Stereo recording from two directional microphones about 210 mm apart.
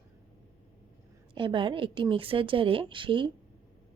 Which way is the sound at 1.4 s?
25° right (ahead or behind).